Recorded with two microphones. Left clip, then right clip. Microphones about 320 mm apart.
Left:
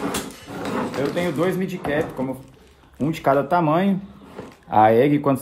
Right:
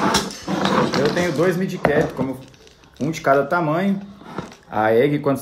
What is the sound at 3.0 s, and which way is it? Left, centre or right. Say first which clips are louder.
Speech: right 2 dB; centre.